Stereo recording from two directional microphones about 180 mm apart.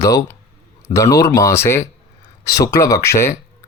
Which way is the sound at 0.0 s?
20° left (ahead or behind).